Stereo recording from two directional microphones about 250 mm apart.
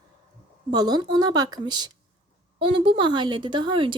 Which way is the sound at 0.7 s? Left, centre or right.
Centre.